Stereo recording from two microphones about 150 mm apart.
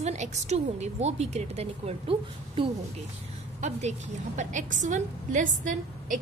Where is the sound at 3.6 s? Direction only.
50° right (ahead or behind).